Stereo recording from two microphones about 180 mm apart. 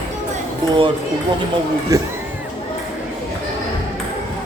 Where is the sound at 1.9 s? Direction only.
20° right (ahead or behind).